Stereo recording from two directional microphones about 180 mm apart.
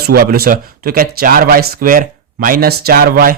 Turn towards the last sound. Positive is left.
turn(degrees=-55)  # may be behind; listen again after turning